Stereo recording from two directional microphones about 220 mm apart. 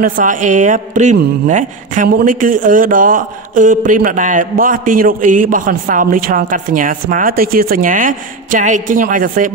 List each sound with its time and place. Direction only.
0.0 s speech: 35° right (ahead or behind)